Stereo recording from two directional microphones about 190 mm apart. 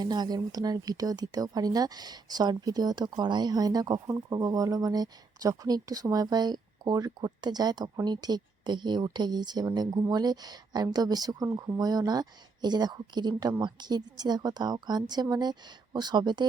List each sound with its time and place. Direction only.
0.0 s speech: 20° right (ahead or behind)